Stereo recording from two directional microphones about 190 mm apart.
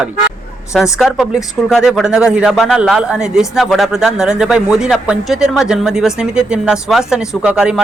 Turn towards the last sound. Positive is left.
turn(degrees=-5)  # may be behind; listen again after turning